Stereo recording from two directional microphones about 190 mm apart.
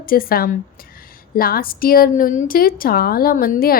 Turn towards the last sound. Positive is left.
turn(degrees=50)  # may be behind; listen again after turning